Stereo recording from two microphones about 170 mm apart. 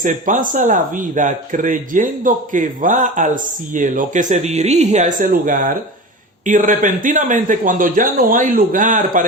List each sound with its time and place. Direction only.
0.0 s speech: 50° right (ahead or behind)